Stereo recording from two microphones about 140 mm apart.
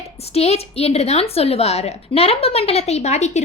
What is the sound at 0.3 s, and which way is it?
A woman's voice, 50° left (ahead or behind).